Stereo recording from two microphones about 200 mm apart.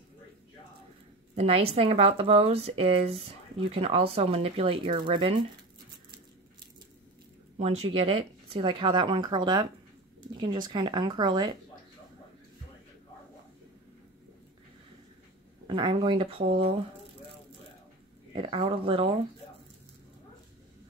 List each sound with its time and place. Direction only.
1.3 s a woman's voice: 30° right (ahead or behind)
7.5 s speech: 30° right (ahead or behind)
15.6 s speech: 25° right (ahead or behind)
18.3 s speech: 25° right (ahead or behind)